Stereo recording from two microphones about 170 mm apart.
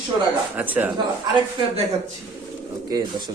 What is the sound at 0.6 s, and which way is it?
Speech, 10° right (ahead or behind).